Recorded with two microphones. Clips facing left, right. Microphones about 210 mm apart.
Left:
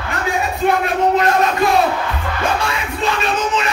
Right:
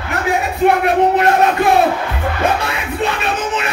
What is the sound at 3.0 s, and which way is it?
Music, 60° right (ahead or behind).